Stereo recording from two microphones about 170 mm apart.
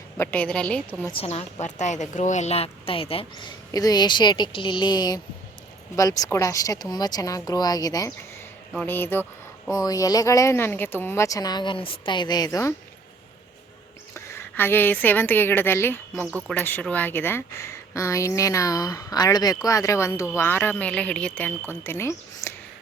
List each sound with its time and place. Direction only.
0.2 s speech: 10° left (ahead or behind)
1.1 s speech: 35° left (ahead or behind)
3.7 s speech: 20° left (ahead or behind)
8.7 s speech: 10° left (ahead or behind)
14.1 s a woman's voice: 10° left (ahead or behind)